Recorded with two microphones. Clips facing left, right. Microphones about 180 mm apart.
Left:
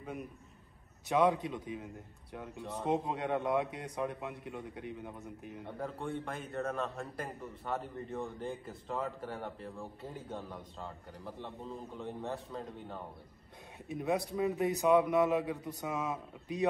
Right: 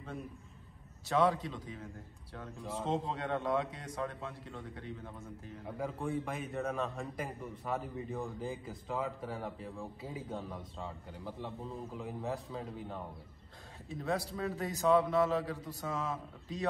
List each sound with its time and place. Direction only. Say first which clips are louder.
1.0 s a man's voice: left 1 dB; 20° left (ahead or behind)
2.5 s a man's voice: even; centre (ahead or behind)
2.9 s a man's voice: left 3 dB; 15° left (ahead or behind)
5.7 s a man's voice: right 2 dB; centre (ahead or behind)
13.8 s a man's voice: left 2 dB; 20° left (ahead or behind)